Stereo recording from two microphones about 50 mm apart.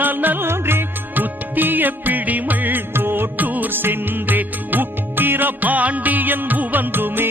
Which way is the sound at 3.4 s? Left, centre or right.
Right.